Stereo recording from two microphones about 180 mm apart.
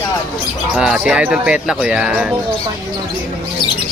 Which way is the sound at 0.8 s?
5° right (ahead or behind).